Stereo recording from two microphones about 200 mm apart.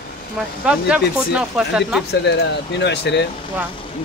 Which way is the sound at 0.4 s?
5° right (ahead or behind).